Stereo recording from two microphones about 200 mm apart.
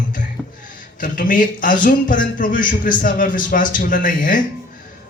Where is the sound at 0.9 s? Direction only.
45° left (ahead or behind).